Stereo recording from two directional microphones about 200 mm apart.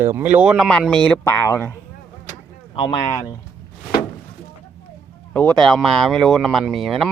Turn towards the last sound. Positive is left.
turn(degrees=0)  # may be behind; listen again after turning